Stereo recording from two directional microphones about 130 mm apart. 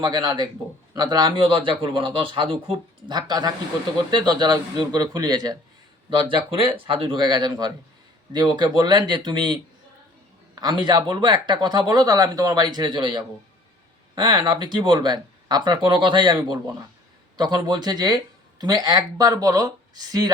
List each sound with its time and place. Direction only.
0.0 s speech: 30° right (ahead or behind)
6.1 s speech: 40° right (ahead or behind)